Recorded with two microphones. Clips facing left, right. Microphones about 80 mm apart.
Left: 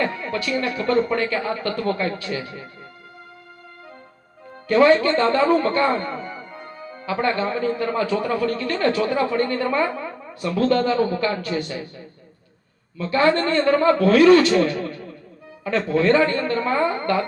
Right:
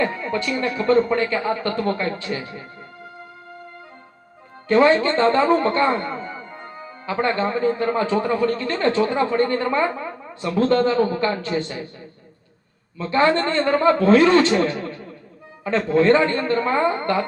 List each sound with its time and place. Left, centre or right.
0.0 s a man's voice: right
4.7 s a man's voice: right
13.0 s a man's voice: right